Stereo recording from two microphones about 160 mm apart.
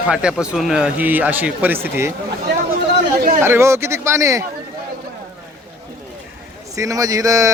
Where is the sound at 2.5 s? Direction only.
90° right.